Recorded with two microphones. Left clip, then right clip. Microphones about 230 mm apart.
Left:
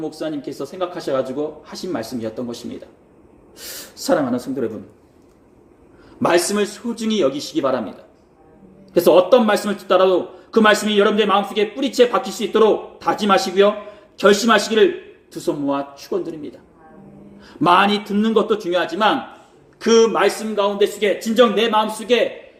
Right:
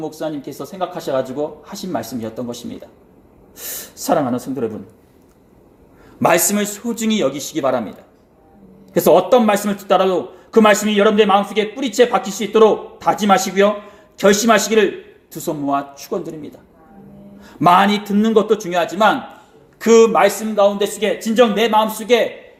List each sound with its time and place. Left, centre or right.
0.6 s speech: right
3.9 s speech: right
6.1 s a man's voice: right
8.9 s speech: right
17.6 s a man's voice: right